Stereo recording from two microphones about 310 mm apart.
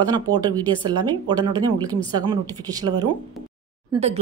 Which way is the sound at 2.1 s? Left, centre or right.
Centre.